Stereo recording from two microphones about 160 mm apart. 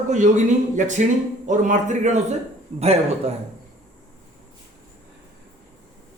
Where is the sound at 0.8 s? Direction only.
50° right (ahead or behind).